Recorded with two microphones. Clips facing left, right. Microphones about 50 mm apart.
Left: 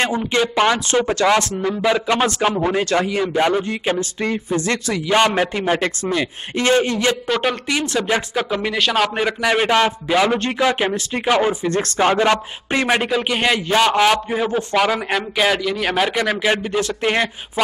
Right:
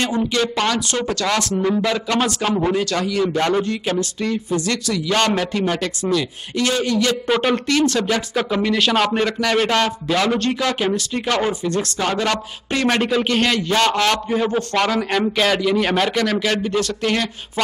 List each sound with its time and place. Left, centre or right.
0.4 s a man's voice: left
2.7 s speech: left
7.2 s speech: centre
7.9 s speech: centre
8.7 s a man's voice: centre
11.6 s speech: left
12.8 s a man's voice: centre